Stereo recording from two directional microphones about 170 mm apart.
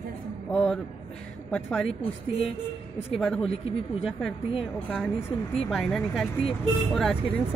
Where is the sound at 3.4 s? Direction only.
35° left (ahead or behind).